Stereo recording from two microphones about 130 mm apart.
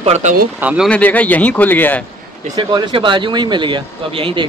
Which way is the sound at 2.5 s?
35° right (ahead or behind).